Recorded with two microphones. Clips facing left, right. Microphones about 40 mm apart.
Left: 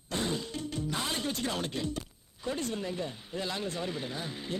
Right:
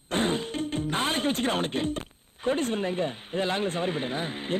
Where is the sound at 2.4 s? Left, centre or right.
Right.